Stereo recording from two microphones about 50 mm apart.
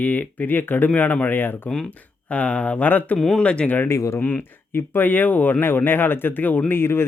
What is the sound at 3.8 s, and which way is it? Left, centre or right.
Speech, left.